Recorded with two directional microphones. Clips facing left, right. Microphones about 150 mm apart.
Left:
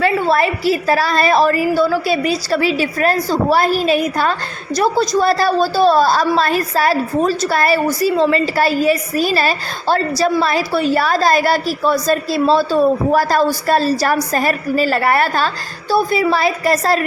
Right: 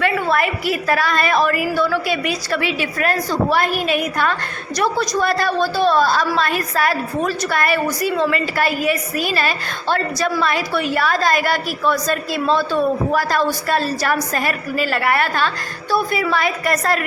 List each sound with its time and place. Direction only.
0.0 s a woman's voice: 30° left (ahead or behind)